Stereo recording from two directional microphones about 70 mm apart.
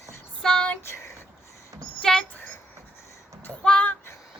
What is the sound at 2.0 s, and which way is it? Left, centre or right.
Speech, centre.